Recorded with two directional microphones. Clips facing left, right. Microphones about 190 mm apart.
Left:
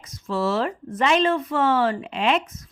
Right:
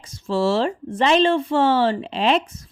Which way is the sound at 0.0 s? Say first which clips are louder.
Right 4 dB; 30° right (ahead or behind).